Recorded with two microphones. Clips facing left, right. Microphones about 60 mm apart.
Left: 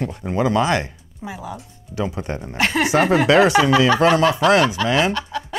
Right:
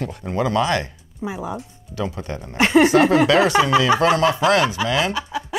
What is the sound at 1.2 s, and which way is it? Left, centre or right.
Speech, right.